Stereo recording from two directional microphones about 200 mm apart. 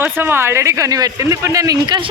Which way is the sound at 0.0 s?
10° right (ahead or behind).